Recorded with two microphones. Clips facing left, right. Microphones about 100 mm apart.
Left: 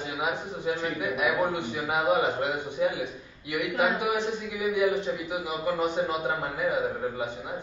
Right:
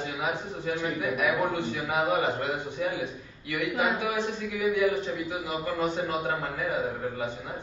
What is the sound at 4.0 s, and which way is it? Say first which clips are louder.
A man's voice: left 1 dB; 15° left (ahead or behind).